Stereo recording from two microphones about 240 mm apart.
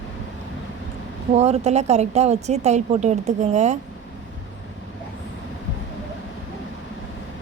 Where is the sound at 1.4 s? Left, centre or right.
Right.